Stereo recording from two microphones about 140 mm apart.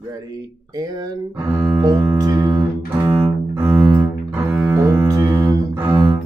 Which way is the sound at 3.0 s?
15° right (ahead or behind).